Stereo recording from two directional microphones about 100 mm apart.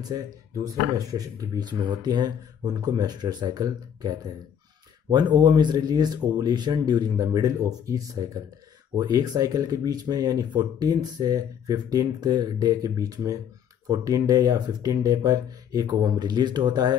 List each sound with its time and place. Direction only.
0.9 s speech: 40° right (ahead or behind)